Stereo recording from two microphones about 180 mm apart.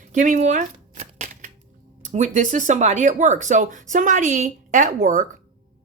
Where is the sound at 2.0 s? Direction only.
40° right (ahead or behind).